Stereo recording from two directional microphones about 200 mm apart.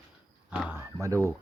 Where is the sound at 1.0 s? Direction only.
15° right (ahead or behind).